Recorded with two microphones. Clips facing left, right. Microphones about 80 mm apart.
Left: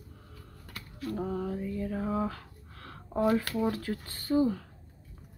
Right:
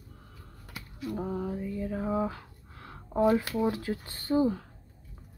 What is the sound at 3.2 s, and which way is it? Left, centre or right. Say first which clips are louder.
Speech: right 2 dB; centre.